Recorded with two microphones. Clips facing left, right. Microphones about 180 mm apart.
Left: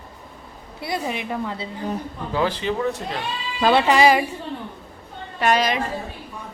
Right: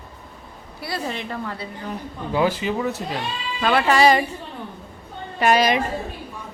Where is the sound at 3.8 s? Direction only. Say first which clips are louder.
Right 3 dB; 15° left (ahead or behind).